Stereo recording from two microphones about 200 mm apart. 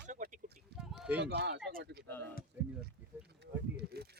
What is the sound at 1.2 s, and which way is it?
Speech, 60° right (ahead or behind).